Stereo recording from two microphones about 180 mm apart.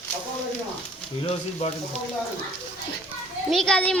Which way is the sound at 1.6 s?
35° left (ahead or behind).